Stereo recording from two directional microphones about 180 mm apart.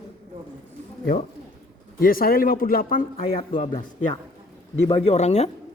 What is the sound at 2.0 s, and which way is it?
Speech, 55° left (ahead or behind).